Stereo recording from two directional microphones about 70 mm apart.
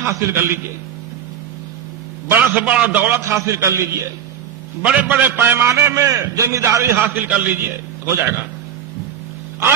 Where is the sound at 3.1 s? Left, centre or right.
Right.